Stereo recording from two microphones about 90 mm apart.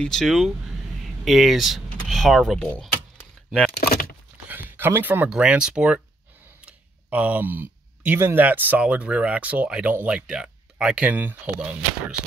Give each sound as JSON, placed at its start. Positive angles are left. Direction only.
{"t": 0.0, "sound": "speech", "side_deg": 5}
{"t": 4.5, "sound": "a sound", "side_deg": -20}
{"t": 5.3, "sound": "speech", "side_deg": -10}